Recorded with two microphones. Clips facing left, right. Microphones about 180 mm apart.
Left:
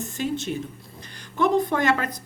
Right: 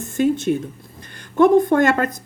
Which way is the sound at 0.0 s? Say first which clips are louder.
Right 9 dB; 50° right (ahead or behind).